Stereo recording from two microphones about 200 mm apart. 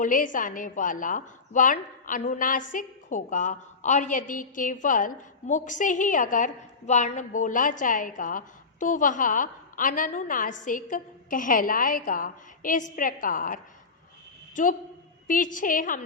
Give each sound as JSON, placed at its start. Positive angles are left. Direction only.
{"t": 0.0, "sound": "a woman's voice", "side_deg": 40}